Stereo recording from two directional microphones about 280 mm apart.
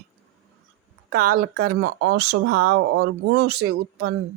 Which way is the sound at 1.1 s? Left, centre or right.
Right.